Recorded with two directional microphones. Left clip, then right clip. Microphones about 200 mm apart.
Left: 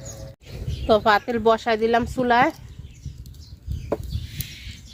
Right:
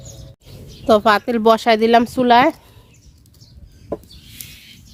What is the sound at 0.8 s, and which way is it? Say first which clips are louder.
Speech: right 4 dB; 60° right (ahead or behind).